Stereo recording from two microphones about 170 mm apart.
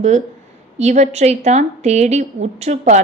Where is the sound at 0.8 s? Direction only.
40° right (ahead or behind).